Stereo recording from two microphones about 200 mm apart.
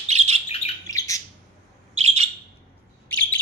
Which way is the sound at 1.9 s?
30° right (ahead or behind).